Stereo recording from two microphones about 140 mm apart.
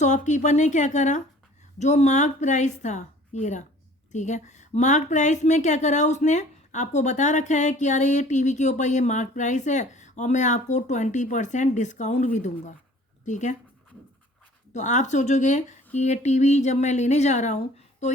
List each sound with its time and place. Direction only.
0.0 s speech: 60° left (ahead or behind)
14.7 s speech: 60° left (ahead or behind)